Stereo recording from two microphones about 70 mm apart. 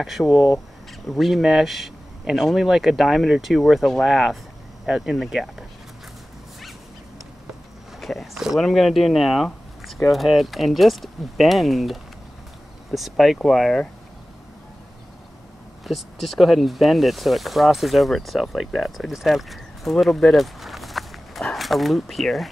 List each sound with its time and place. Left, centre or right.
0.0 s speech: centre
8.0 s a sound: centre
8.5 s speech: centre
15.9 s speech: centre